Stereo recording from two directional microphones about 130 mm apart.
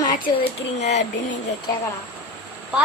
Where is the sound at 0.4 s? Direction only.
60° left (ahead or behind).